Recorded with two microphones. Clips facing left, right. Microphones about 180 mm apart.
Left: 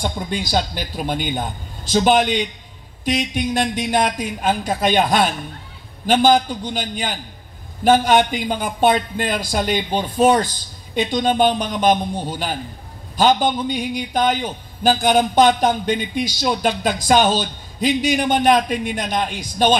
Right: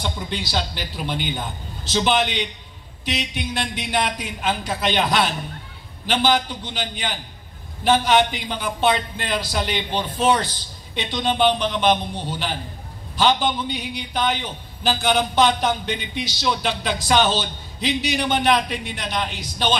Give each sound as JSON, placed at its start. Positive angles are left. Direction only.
{"t": 0.0, "sound": "a man's voice", "side_deg": 45}